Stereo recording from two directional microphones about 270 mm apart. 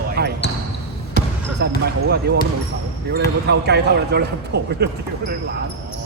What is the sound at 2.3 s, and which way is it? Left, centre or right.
Speech, right.